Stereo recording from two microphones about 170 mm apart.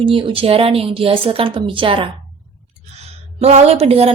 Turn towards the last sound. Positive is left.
turn(degrees=-35)  # may be behind; listen again after turning